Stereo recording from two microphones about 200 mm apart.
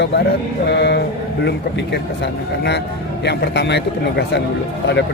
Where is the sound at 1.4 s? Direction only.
60° left (ahead or behind).